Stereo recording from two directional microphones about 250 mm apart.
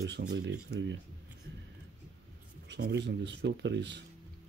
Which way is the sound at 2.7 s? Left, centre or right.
Right.